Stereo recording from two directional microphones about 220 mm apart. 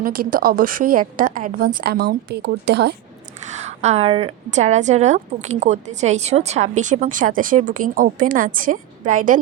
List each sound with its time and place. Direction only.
0.0 s a woman's voice: 40° right (ahead or behind)
3.4 s a woman's voice: 30° right (ahead or behind)